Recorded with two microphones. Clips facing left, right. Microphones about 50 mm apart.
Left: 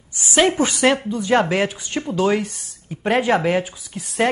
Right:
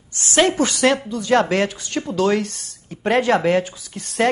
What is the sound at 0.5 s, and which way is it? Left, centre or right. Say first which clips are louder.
A woman's voice: even; centre.